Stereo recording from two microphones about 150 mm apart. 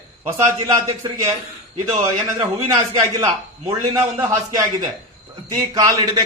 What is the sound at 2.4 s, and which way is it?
Speech, 25° right (ahead or behind).